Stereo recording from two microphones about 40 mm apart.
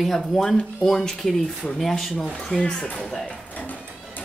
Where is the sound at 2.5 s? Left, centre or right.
Centre.